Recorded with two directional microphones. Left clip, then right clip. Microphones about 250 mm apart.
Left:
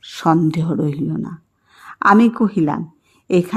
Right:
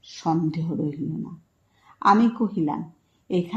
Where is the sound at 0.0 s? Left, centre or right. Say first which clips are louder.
Left 9 dB; left.